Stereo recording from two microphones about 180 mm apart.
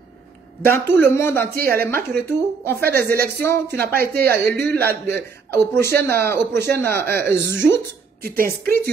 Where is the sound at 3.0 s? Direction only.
60° right (ahead or behind).